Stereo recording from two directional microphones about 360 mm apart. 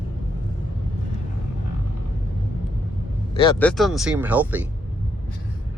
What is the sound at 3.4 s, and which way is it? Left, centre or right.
Speech, centre.